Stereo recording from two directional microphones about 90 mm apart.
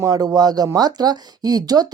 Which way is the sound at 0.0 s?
35° right (ahead or behind).